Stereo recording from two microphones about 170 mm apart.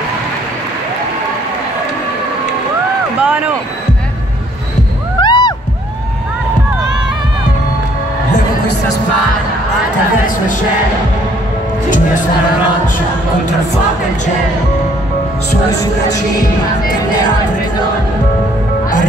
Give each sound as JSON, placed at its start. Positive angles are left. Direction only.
{"t": 3.2, "sound": "speech", "side_deg": -10}
{"t": 5.2, "sound": "music", "side_deg": 25}